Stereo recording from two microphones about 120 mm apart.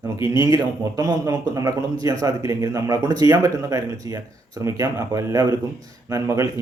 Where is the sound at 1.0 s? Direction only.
30° right (ahead or behind).